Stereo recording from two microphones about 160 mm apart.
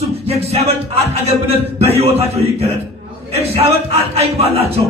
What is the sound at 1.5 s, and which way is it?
Music, 40° right (ahead or behind).